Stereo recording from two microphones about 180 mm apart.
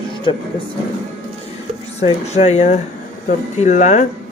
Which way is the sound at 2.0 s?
40° left (ahead or behind).